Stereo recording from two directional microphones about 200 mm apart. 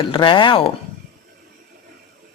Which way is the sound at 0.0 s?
25° left (ahead or behind).